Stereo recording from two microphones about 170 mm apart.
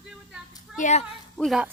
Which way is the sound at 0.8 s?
45° left (ahead or behind).